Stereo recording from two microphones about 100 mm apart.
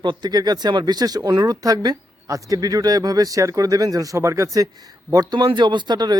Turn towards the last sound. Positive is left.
turn(degrees=-45)  # may be behind; listen again after turning